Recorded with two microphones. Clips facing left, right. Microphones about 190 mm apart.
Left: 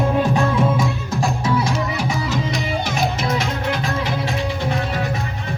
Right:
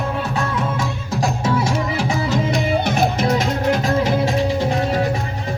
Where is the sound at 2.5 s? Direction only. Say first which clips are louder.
Right 4 dB; 55° right (ahead or behind).